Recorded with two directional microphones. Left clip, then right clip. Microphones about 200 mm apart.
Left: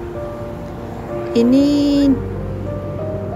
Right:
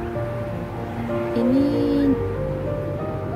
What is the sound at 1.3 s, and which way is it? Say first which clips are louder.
Speech: left 7 dB; 45° left (ahead or behind).